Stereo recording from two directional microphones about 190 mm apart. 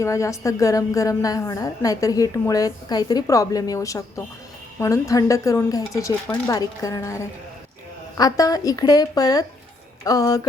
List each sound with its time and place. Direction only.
0.0 s a woman's voice: 15° left (ahead or behind)
8.2 s speech: 20° left (ahead or behind)